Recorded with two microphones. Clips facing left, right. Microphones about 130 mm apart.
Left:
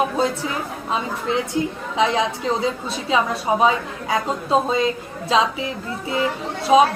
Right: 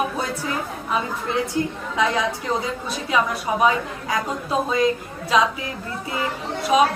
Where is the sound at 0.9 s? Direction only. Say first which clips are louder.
Left 2 dB; 20° left (ahead or behind).